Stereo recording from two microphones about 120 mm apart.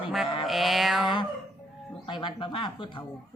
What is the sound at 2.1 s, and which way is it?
Speech, 40° left (ahead or behind).